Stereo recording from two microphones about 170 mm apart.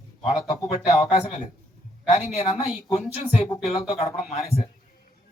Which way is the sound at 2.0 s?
40° left (ahead or behind).